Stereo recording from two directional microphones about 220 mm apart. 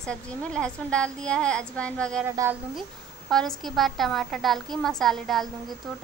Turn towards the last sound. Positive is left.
turn(degrees=0)  # may be behind; listen again after turning